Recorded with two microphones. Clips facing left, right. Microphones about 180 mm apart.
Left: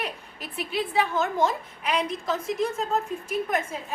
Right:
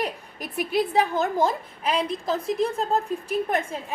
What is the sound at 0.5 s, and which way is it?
A woman's voice, 45° right (ahead or behind).